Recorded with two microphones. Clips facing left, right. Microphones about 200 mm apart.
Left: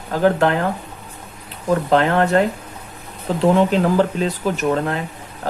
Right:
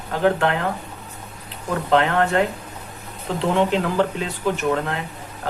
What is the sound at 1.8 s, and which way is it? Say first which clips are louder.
Speech: left 1 dB; 40° left (ahead or behind).